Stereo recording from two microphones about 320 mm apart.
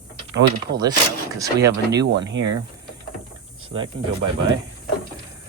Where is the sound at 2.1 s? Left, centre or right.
Right.